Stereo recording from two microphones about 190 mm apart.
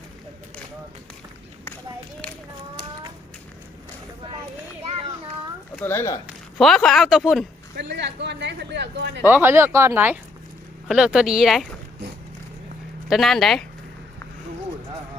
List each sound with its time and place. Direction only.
5.7 s speech: 10° left (ahead or behind)
6.2 s speech: centre (ahead or behind)
7.8 s a sound: 65° right (ahead or behind)
9.2 s speech: 10° right (ahead or behind)
13.1 s speech: centre (ahead or behind)